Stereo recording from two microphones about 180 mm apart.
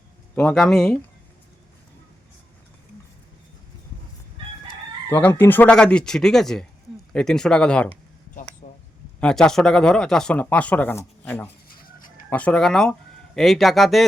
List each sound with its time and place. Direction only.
0.3 s speech: 5° left (ahead or behind)
5.0 s speech: 15° left (ahead or behind)
8.6 s a sound: 35° left (ahead or behind)
9.2 s speech: 5° left (ahead or behind)
11.7 s chicken: 50° left (ahead or behind)
12.3 s speech: 5° left (ahead or behind)